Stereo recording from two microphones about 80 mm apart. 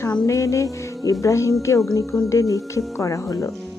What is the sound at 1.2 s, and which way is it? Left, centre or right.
Speech, left.